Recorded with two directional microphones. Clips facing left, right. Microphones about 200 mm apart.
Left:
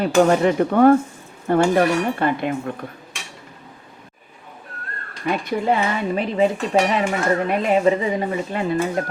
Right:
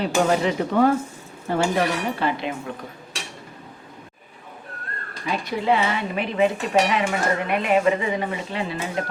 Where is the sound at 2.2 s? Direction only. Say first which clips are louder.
Left 4 dB; 50° left (ahead or behind).